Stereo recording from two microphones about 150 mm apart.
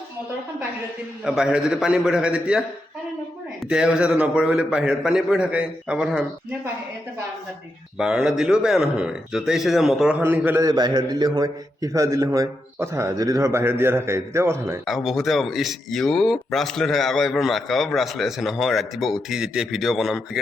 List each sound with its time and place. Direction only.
1.2 s speech: 5° right (ahead or behind)
7.9 s speech: 5° right (ahead or behind)
10.6 s a man's voice: 25° right (ahead or behind)
14.8 s speech: centre (ahead or behind)